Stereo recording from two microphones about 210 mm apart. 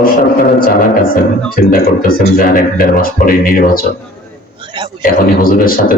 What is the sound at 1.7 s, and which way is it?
Speech, 45° left (ahead or behind).